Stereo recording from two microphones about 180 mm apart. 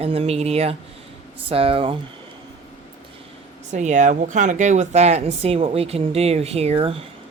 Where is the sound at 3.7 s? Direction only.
40° right (ahead or behind).